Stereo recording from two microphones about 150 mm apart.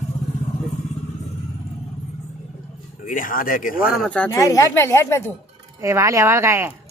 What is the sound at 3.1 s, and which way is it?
Speech, 65° left (ahead or behind).